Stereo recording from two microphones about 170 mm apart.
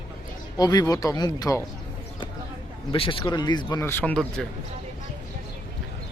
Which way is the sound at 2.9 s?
30° left (ahead or behind).